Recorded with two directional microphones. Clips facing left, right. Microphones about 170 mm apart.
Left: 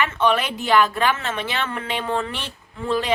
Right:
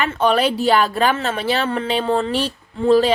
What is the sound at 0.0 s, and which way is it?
A woman's voice, 35° right (ahead or behind).